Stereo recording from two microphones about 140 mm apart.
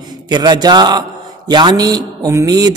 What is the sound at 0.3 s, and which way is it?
A man's voice, 30° right (ahead or behind).